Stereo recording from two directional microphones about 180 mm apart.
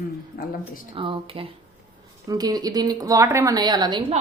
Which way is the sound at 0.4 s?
55° left (ahead or behind).